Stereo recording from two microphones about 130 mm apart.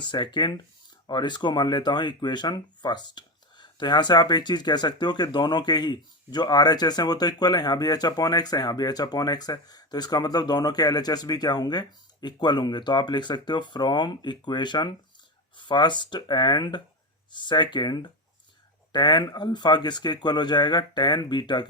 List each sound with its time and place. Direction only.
0.0 s speech: 35° left (ahead or behind)